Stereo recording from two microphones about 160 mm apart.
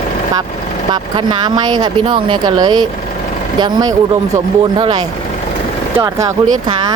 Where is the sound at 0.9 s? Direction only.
30° right (ahead or behind).